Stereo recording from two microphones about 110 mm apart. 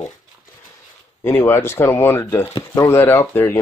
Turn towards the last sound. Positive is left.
turn(degrees=20)  # may be behind; listen again after turning